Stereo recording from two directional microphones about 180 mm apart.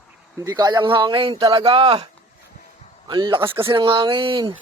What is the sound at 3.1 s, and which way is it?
Speech, 25° right (ahead or behind).